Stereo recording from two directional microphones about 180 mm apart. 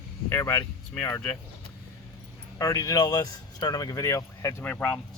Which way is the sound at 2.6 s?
20° left (ahead or behind).